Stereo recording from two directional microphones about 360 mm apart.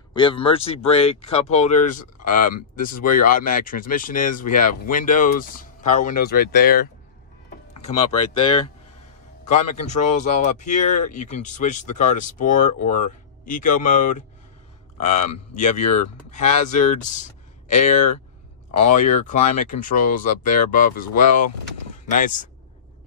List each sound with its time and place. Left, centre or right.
0.1 s speech: centre
7.8 s speech: centre